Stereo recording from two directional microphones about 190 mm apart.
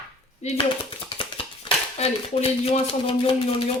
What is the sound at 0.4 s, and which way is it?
A woman's voice, 30° left (ahead or behind).